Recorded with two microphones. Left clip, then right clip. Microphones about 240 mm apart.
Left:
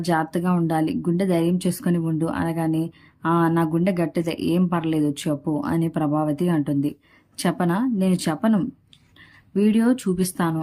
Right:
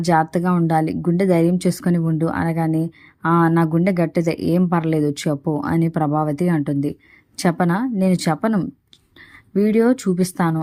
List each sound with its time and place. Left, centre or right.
0.0 s a woman's voice: centre